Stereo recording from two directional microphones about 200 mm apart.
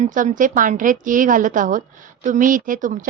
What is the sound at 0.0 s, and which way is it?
A woman's voice, 40° right (ahead or behind).